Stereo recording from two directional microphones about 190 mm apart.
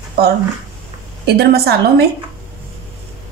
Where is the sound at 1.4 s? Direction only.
60° right (ahead or behind).